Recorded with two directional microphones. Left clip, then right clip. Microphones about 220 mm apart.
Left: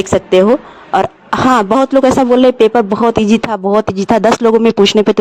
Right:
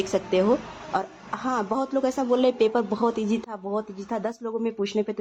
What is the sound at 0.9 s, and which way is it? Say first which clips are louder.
Speech: left 16 dB; 45° left (ahead or behind).